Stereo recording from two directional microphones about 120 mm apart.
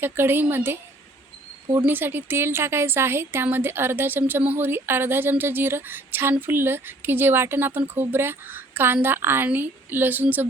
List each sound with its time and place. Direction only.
0.0 s a woman's voice: 20° right (ahead or behind)
1.8 s a woman's voice: 15° right (ahead or behind)